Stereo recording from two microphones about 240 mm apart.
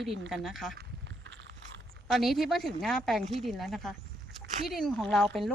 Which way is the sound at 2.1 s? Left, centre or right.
Centre.